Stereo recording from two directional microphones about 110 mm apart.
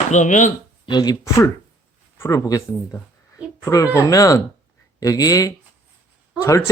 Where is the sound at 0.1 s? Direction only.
90° left.